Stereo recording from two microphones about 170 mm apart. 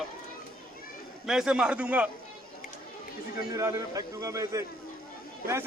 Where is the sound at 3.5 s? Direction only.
20° right (ahead or behind).